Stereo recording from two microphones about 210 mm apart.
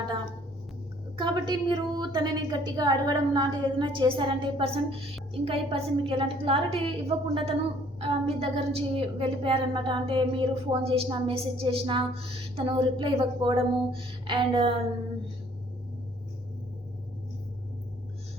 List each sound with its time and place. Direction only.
1.2 s a woman's voice: 20° right (ahead or behind)